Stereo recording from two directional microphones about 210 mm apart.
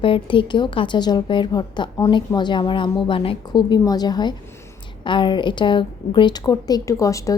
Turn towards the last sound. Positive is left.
turn(degrees=15)  # may be behind; listen again after turning